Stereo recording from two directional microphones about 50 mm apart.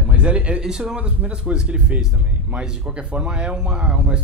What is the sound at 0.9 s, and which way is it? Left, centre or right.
Speech, right.